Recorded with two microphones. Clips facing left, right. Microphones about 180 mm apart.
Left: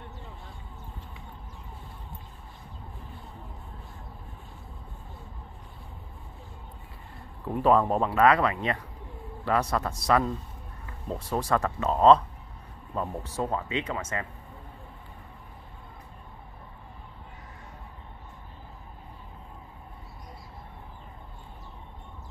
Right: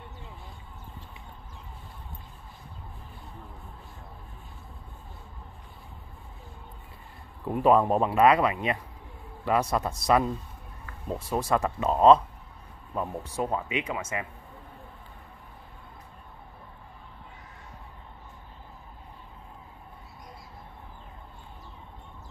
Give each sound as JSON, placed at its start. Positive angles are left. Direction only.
{"t": 7.4, "sound": "speech", "side_deg": -15}